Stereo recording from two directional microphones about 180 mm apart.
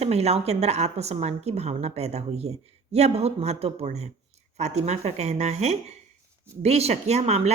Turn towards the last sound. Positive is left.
turn(degrees=-35)  # may be behind; listen again after turning